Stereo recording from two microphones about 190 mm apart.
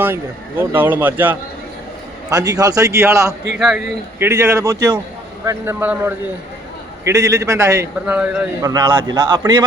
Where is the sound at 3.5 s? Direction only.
5° right (ahead or behind).